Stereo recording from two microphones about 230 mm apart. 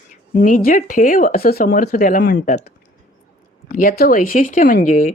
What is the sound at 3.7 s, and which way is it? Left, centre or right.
Speech, left.